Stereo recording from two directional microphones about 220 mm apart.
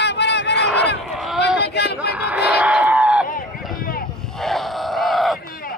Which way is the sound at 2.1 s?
5° right (ahead or behind).